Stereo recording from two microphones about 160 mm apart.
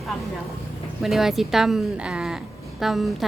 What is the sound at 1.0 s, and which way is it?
A woman's voice, centre (ahead or behind).